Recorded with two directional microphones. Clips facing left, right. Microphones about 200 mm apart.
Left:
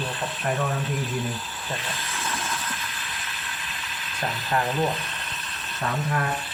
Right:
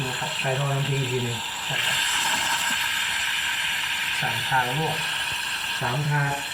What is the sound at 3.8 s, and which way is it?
Speech, 80° right.